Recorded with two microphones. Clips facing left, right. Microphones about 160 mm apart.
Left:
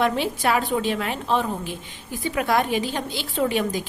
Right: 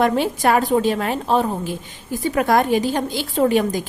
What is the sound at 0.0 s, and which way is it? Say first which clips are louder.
A woman's voice: right 4 dB; 45° right (ahead or behind).